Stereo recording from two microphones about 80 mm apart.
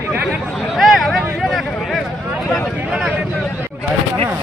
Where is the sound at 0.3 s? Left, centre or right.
Centre.